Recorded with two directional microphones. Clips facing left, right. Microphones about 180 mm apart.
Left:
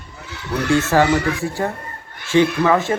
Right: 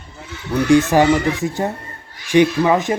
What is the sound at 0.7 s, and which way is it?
Speech, 15° right (ahead or behind).